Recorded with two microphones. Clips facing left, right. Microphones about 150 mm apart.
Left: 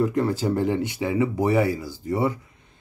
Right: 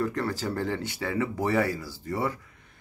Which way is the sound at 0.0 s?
20° left (ahead or behind).